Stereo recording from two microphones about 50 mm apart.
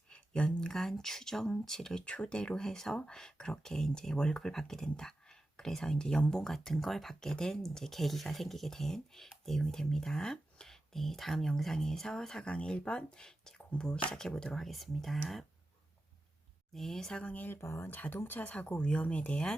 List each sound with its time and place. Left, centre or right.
0.1 s a sound: left
0.7 s speech: centre
2.0 s speech: left
6.4 s speech: centre
14.6 s speech: centre
16.7 s speech: centre
17.5 s speech: left
17.8 s speech: left